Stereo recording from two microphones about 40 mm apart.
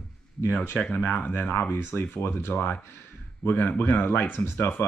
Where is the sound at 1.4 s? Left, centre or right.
Left.